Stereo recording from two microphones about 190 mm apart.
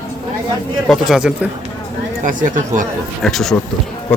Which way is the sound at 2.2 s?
45° right (ahead or behind).